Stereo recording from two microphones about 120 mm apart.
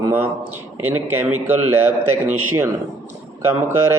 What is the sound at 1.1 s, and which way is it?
A man's voice, 15° right (ahead or behind).